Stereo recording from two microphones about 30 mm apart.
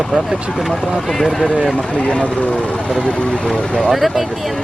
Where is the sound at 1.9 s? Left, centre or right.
Left.